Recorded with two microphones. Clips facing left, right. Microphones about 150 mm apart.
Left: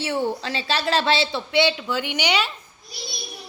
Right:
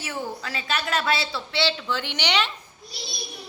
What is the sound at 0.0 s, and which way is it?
A woman's voice, 30° left (ahead or behind).